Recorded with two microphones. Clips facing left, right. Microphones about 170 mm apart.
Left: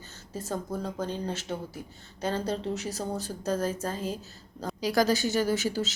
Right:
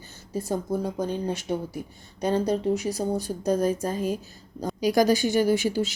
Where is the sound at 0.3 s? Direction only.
10° right (ahead or behind).